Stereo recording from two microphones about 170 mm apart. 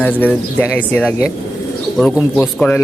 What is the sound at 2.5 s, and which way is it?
Speech, 10° left (ahead or behind).